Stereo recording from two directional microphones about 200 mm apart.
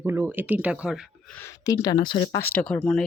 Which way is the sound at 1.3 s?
15° left (ahead or behind).